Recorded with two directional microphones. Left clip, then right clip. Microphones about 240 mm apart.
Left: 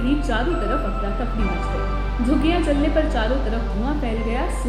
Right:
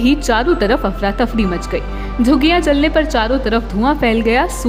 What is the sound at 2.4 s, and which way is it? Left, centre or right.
A woman's voice, right.